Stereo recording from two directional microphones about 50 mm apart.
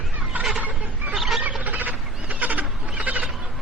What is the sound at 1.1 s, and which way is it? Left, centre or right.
Fowl, centre.